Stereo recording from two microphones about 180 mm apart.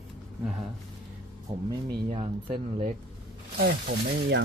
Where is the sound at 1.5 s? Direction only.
25° right (ahead or behind).